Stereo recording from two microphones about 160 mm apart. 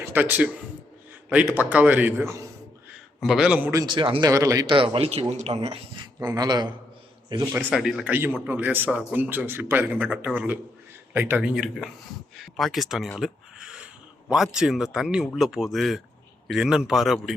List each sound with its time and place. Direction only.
0.1 s a man's voice: 10° right (ahead or behind)
3.2 s speech: 5° right (ahead or behind)
3.7 s speech: 25° right (ahead or behind)
4.3 s a man's voice: 20° right (ahead or behind); by 5.5 s 40° right (ahead or behind)
6.1 s speech: 25° right (ahead or behind)
7.7 s a man's voice: centre (ahead or behind)